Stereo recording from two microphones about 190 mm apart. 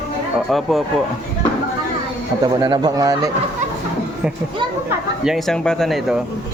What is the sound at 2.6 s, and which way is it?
Speech, 20° right (ahead or behind).